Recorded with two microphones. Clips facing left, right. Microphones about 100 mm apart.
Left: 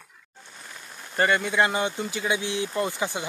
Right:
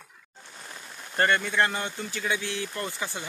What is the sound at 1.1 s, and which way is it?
Speech, 10° left (ahead or behind).